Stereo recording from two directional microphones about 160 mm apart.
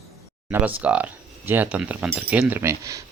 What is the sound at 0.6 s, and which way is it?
Speech, 10° right (ahead or behind).